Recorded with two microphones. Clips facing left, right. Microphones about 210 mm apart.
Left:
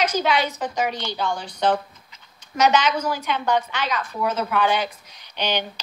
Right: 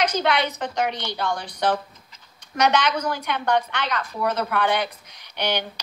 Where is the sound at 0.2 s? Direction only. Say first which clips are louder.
Left 1 dB; 65° right (ahead or behind).